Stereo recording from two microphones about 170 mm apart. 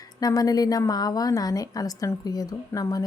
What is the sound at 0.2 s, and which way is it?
A woman's voice, 20° left (ahead or behind).